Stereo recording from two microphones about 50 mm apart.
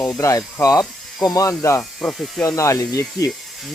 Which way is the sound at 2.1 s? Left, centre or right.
Centre.